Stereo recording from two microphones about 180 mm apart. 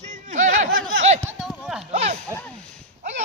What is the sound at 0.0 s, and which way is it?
Snicker, 45° right (ahead or behind).